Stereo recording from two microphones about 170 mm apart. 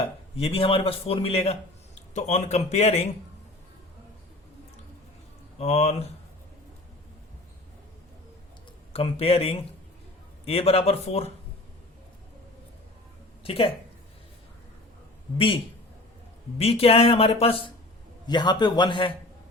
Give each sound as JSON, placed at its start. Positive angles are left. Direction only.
{"t": 0.0, "sound": "a man's voice", "side_deg": 35}
{"t": 5.5, "sound": "speech", "side_deg": 40}
{"t": 8.9, "sound": "speech", "side_deg": 35}
{"t": 13.4, "sound": "speech", "side_deg": 35}
{"t": 15.4, "sound": "a man's voice", "side_deg": 30}